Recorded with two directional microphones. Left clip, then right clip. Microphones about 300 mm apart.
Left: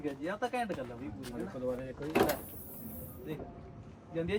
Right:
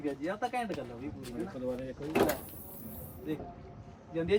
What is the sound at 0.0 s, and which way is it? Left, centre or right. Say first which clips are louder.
Speech: right 1 dB; centre.